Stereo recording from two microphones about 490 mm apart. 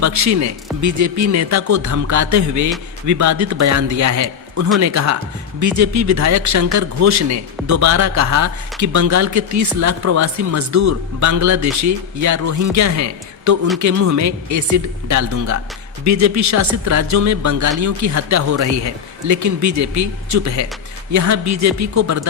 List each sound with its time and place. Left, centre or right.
0.0 s speech: right